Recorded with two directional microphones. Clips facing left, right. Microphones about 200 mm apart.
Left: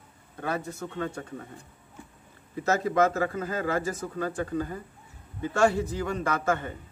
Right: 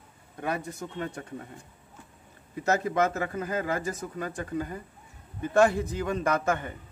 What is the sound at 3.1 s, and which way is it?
A man's voice, 15° right (ahead or behind).